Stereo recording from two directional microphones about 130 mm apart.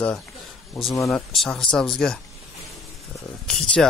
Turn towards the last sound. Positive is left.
turn(degrees=5)  # may be behind; listen again after turning